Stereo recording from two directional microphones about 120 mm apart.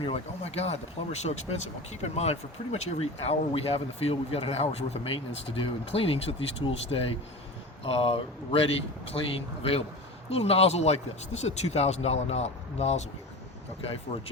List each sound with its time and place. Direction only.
0.0 s speech: 55° left (ahead or behind)
10.2 s speech: 60° left (ahead or behind)
14.1 s speech: 60° left (ahead or behind)